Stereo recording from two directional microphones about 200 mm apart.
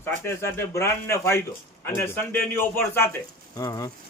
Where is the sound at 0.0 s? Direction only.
10° left (ahead or behind).